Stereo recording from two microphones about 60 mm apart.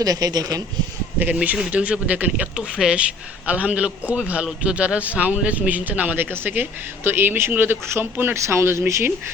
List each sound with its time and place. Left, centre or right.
0.0 s speech: right
1.2 s a man's voice: right
2.6 s a man's voice: centre; by 8.8 s right